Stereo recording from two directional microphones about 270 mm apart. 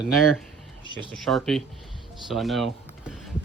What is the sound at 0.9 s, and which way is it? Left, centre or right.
Speech, centre.